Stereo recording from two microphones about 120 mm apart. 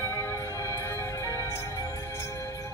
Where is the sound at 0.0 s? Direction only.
20° left (ahead or behind).